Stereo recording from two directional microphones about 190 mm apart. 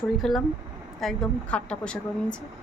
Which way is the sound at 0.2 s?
Centre (ahead or behind).